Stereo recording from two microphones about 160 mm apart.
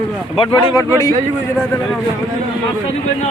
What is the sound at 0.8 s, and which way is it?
Speech, 20° left (ahead or behind).